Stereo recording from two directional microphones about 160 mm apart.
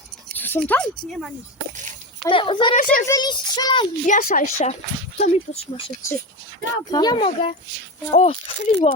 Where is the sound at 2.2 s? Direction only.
30° left (ahead or behind).